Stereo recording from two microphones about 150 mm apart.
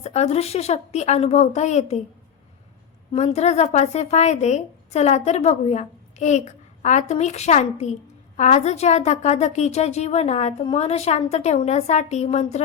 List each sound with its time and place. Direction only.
0.0 s speech: 45° left (ahead or behind)
3.1 s speech: 45° left (ahead or behind)